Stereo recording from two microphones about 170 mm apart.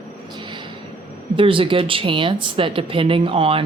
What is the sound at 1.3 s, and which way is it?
Speech, 30° right (ahead or behind).